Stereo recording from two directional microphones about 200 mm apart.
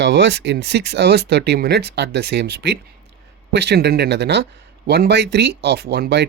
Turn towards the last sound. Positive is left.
turn(degrees=-55)  # may be behind; listen again after turning